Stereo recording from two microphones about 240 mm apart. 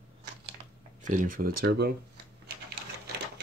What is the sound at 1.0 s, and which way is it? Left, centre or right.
Speech, right.